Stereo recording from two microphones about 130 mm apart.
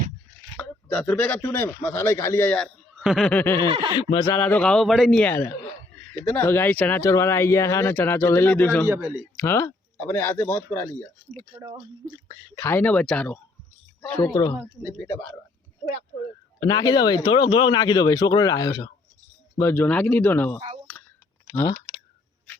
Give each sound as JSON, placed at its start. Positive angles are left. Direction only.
{"t": 0.4, "sound": "speech", "side_deg": 15}
{"t": 3.0, "sound": "snicker", "side_deg": 0}
{"t": 3.2, "sound": "speech", "side_deg": 15}
{"t": 3.7, "sound": "speech", "side_deg": -40}
{"t": 3.9, "sound": "speech", "side_deg": 35}
{"t": 4.4, "sound": "speech", "side_deg": 15}
{"t": 5.2, "sound": "a man's voice", "side_deg": 20}
{"t": 8.9, "sound": "speech", "side_deg": -20}
{"t": 9.4, "sound": "speech", "side_deg": 20}
{"t": 12.3, "sound": "speech", "side_deg": 20}
{"t": 16.6, "sound": "speech", "side_deg": 30}
{"t": 19.5, "sound": "speech", "side_deg": 20}